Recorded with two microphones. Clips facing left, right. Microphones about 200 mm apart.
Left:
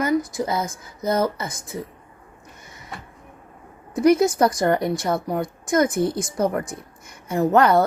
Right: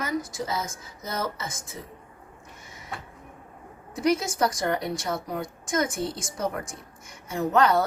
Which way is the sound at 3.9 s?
60° left (ahead or behind).